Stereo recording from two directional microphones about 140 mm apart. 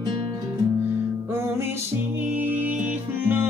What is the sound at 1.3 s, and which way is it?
Music, 20° right (ahead or behind).